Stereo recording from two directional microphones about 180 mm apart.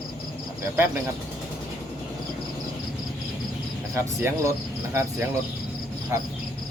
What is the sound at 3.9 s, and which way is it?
Cricket, 15° right (ahead or behind).